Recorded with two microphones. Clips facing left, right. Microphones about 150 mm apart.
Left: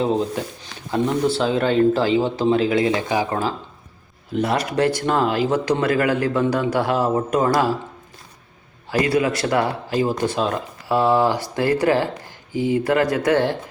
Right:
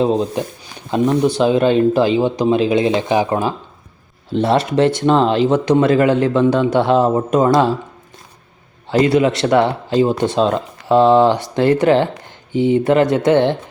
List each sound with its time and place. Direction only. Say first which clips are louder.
0.0 s speech: right 4 dB; 20° right (ahead or behind)
8.9 s speech: right 6 dB; 25° right (ahead or behind)